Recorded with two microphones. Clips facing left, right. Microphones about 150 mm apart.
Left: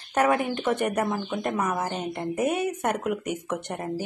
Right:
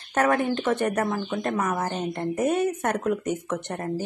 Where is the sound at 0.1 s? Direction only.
15° left (ahead or behind).